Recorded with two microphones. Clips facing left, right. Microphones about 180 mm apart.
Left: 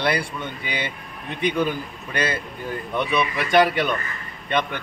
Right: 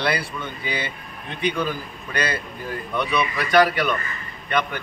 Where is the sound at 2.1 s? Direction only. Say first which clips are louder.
Left 1 dB; 25° left (ahead or behind).